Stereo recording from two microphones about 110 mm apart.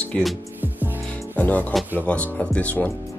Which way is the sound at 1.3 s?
15° left (ahead or behind).